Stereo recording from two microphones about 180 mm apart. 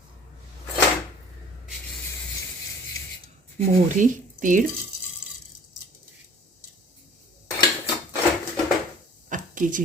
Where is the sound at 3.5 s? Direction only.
45° right (ahead or behind).